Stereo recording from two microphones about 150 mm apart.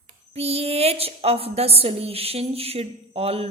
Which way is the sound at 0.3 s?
40° right (ahead or behind).